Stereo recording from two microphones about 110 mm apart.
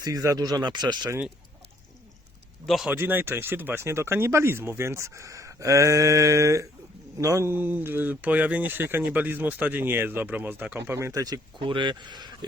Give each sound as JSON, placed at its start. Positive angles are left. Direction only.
{"t": 0.0, "sound": "speech", "side_deg": -30}
{"t": 2.6, "sound": "speech", "side_deg": 0}
{"t": 2.9, "sound": "speech", "side_deg": -20}
{"t": 10.9, "sound": "speech", "side_deg": -30}
{"t": 11.6, "sound": "speech", "side_deg": -45}